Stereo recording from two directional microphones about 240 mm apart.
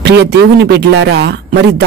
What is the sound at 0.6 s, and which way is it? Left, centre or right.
A woman's voice, right.